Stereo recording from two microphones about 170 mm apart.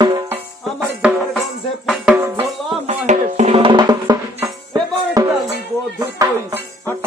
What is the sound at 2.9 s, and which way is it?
Music, 40° right (ahead or behind).